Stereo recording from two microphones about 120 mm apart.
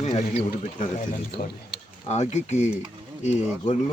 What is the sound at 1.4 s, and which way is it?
Speech, 90° left.